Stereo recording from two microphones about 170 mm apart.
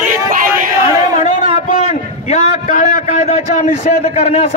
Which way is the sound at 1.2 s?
45° left (ahead or behind).